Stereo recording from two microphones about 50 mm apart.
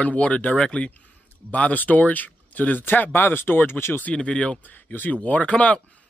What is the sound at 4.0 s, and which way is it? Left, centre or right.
Speech, left.